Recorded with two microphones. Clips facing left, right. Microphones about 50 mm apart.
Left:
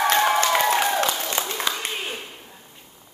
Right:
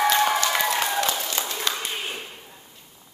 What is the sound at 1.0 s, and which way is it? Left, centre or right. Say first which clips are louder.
Applause: left 2 dB; left.